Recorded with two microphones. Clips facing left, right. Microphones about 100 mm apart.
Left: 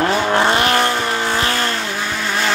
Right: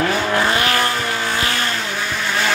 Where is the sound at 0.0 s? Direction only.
30° left (ahead or behind).